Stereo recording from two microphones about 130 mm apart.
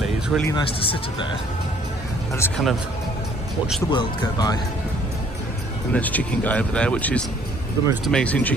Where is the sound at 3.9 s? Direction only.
35° left (ahead or behind).